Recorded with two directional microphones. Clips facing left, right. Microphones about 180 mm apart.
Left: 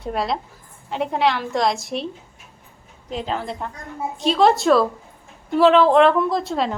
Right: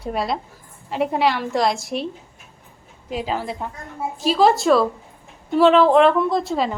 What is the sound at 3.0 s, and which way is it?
A woman's voice, 5° right (ahead or behind).